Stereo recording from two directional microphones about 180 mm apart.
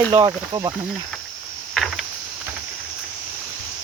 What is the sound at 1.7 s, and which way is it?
Cricket, centre (ahead or behind).